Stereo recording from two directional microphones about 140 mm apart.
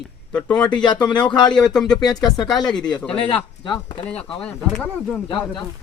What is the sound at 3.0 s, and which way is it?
Speech, 10° left (ahead or behind).